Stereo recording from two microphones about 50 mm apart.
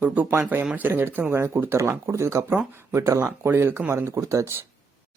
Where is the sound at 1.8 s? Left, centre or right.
Right.